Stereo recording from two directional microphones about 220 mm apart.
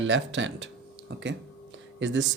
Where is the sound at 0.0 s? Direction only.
60° right (ahead or behind).